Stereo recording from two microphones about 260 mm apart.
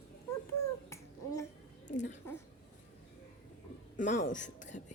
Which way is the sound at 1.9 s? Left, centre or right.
Left.